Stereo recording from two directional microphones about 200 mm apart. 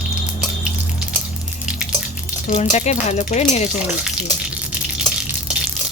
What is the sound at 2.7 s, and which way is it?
Speech, 35° left (ahead or behind).